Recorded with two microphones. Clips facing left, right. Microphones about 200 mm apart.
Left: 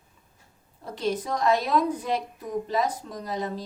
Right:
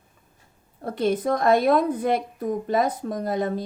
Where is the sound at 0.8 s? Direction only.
55° right (ahead or behind).